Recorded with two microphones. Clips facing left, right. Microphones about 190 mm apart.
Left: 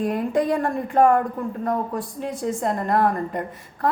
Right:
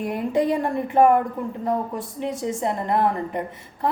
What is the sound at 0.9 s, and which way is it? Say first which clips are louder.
Speech: right 1 dB; 5° right (ahead or behind).